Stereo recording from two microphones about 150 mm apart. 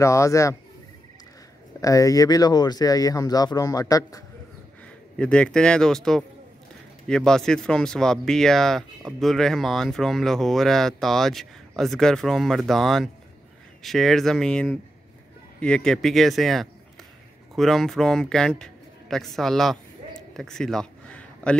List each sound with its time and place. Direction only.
0.0 s speech: 20° left (ahead or behind)
1.8 s speech: 20° left (ahead or behind)
5.1 s a man's voice: 5° left (ahead or behind)